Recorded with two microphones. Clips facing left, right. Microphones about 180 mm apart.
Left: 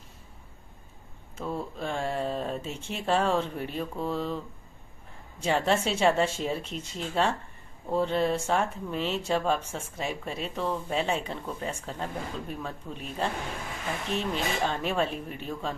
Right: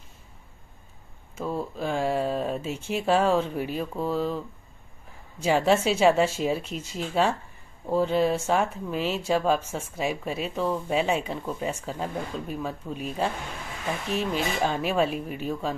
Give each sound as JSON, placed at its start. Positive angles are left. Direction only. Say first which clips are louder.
{"t": 1.3, "sound": "speech", "louder": "right 3 dB", "side_deg": -5}
{"t": 5.4, "sound": "a woman's voice", "louder": "right 4 dB", "side_deg": -5}